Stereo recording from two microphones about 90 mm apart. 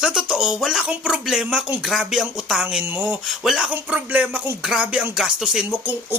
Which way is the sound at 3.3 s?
5° right (ahead or behind).